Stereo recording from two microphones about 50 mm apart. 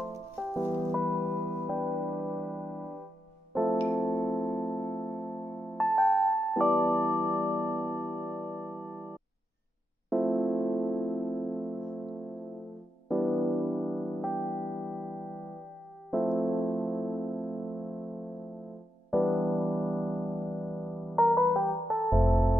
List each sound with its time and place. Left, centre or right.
0.9 s music: centre
3.5 s piano: centre
4.0 s music: centre
10.0 s music: centre
13.1 s electric piano: centre
16.3 s music: centre
19.0 s electric piano: centre
20.2 s electric piano: centre